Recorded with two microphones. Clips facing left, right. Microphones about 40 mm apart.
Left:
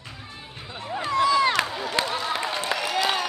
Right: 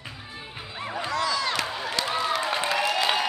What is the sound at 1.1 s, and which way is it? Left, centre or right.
Crowd, left.